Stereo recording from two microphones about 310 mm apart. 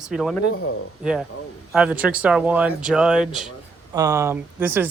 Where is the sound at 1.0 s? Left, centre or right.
Centre.